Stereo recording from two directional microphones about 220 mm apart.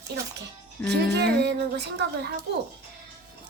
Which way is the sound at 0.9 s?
50° right (ahead or behind).